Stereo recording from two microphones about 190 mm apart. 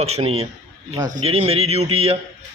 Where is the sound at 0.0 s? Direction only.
30° right (ahead or behind).